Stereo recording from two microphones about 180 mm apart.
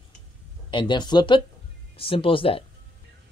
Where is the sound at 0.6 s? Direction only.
25° left (ahead or behind).